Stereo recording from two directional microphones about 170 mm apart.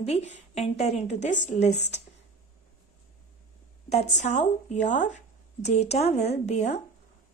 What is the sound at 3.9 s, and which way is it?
A woman's voice, 45° left (ahead or behind).